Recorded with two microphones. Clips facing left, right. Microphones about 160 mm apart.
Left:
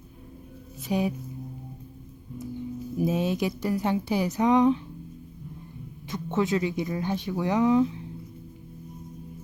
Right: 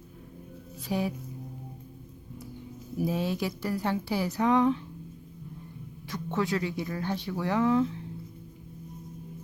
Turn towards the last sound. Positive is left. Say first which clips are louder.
# left 3 dB
turn(degrees=15)  # may be behind; listen again after turning